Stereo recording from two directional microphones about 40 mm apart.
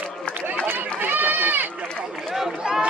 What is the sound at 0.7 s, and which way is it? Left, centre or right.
Run, right.